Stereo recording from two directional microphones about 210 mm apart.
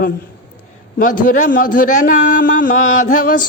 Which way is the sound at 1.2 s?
40° left (ahead or behind).